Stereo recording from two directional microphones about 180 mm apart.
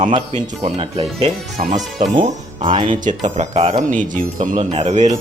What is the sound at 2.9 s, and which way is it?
Speech, 45° right (ahead or behind).